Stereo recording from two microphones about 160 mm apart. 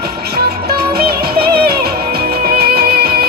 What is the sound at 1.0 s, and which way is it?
Music, 75° right (ahead or behind).